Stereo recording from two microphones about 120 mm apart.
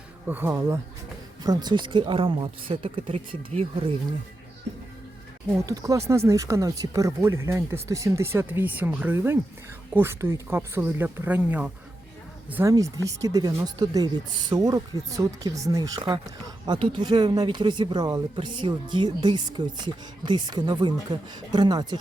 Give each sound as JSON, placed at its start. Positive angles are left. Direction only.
{"t": 0.3, "sound": "speech", "side_deg": -15}
{"t": 1.5, "sound": "speech", "side_deg": -35}
{"t": 3.5, "sound": "speech", "side_deg": -65}
{"t": 5.5, "sound": "speech", "side_deg": -30}
{"t": 12.6, "sound": "speech", "side_deg": -30}